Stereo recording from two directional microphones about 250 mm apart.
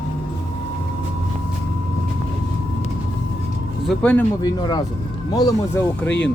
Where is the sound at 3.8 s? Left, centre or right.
Centre.